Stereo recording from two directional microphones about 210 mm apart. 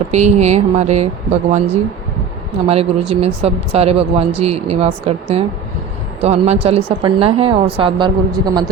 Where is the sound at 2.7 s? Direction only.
30° right (ahead or behind).